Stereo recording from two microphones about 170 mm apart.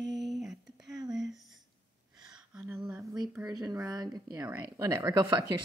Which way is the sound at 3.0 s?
25° right (ahead or behind).